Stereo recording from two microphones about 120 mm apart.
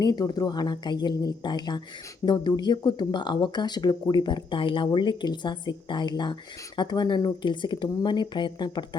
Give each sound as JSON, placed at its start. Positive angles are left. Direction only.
{"t": 0.0, "sound": "speech", "side_deg": 35}